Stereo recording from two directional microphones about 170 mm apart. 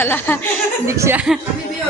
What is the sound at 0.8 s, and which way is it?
Speech, 15° right (ahead or behind).